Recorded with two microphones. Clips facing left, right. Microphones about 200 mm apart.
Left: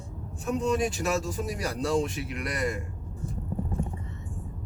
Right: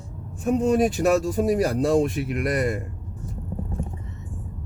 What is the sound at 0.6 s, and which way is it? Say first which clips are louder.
Speech: right 7 dB; 55° right (ahead or behind).